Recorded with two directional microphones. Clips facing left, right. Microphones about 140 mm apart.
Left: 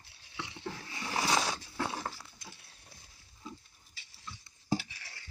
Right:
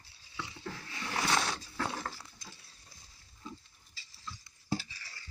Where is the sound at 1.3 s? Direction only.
15° left (ahead or behind).